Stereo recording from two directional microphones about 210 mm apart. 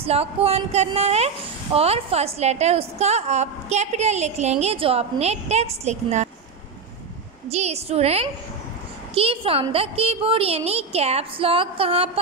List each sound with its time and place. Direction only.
0.0 s a woman's voice: 30° right (ahead or behind)
7.4 s a woman's voice: 30° right (ahead or behind)